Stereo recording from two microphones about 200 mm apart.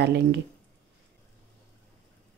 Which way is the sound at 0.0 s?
55° right (ahead or behind).